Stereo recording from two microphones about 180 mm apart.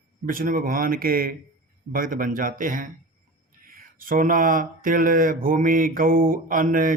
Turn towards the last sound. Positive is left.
turn(degrees=-50)  # may be behind; listen again after turning